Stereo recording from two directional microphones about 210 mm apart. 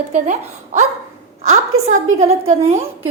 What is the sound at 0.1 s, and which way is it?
Speech, 35° right (ahead or behind).